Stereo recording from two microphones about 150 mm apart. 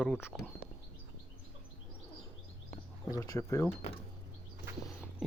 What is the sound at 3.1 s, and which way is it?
Speech, 20° left (ahead or behind).